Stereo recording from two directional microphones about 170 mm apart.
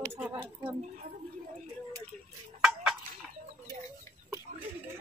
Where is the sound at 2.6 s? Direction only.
5° right (ahead or behind).